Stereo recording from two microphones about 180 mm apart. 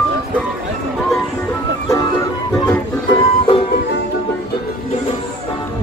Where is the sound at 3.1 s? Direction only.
30° left (ahead or behind).